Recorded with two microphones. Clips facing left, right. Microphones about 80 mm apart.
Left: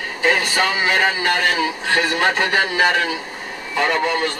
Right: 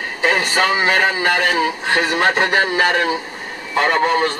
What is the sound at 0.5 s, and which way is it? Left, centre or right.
Speech, right.